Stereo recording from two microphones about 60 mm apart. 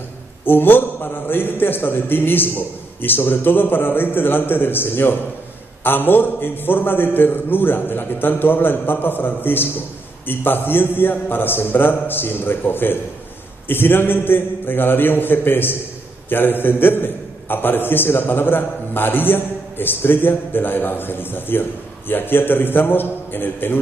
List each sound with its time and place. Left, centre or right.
0.5 s a man's voice: left